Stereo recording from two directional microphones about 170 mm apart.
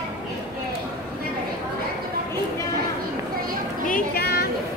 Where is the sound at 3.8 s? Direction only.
60° left (ahead or behind).